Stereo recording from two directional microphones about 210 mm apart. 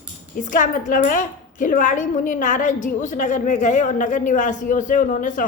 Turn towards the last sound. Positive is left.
turn(degrees=40)  # may be behind; listen again after turning